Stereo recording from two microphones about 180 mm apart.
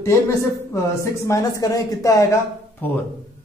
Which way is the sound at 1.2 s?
20° left (ahead or behind).